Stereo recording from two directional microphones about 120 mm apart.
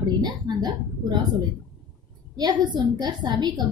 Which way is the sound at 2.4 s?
35° right (ahead or behind).